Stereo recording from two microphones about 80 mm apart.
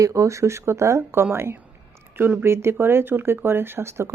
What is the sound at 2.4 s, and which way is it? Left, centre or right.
Speech, right.